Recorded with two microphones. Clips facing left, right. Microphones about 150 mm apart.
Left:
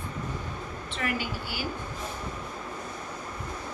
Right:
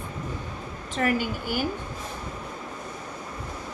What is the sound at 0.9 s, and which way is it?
Speech, 45° right (ahead or behind).